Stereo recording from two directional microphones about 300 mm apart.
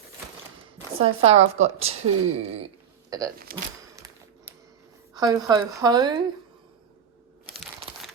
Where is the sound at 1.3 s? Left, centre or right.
Right.